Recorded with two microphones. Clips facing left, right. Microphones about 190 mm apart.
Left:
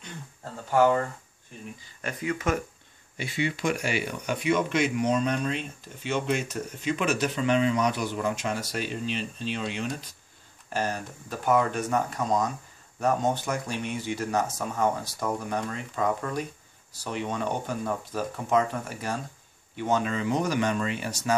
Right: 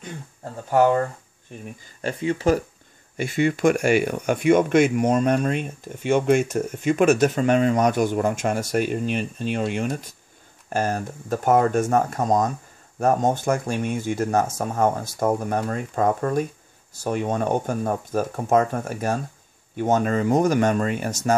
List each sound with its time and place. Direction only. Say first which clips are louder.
0.7 s speech: right 4 dB; 40° right (ahead or behind)
2.0 s speech: right 6 dB; 30° right (ahead or behind)
3.2 s speech: right 8 dB; 50° right (ahead or behind)